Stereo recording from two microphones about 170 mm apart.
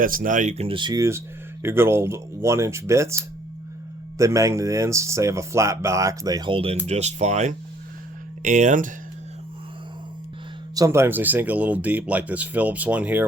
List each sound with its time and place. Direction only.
0.0 s speech: 55° right (ahead or behind)
10.8 s speech: 15° right (ahead or behind)